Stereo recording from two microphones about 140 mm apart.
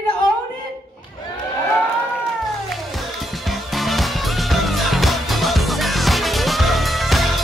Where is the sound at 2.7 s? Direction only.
Centre (ahead or behind).